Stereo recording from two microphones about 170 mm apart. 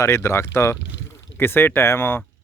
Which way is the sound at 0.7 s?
90° left.